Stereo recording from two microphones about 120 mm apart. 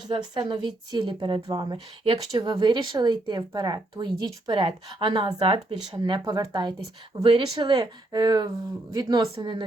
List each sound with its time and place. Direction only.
0.1 s speech: 40° right (ahead or behind)
7.2 s speech: 50° right (ahead or behind)